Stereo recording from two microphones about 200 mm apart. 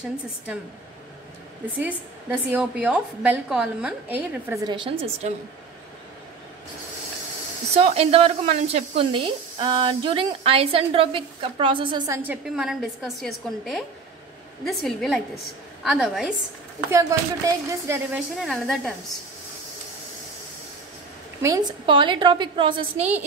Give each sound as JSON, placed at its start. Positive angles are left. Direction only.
{"t": 1.8, "sound": "a woman's voice", "side_deg": -10}
{"t": 4.6, "sound": "speech", "side_deg": -25}
{"t": 7.7, "sound": "speech", "side_deg": -30}
{"t": 12.1, "sound": "a woman's voice", "side_deg": -10}
{"t": 16.9, "sound": "a woman's voice", "side_deg": -15}
{"t": 18.3, "sound": "a woman's voice", "side_deg": 0}
{"t": 21.4, "sound": "speech", "side_deg": -20}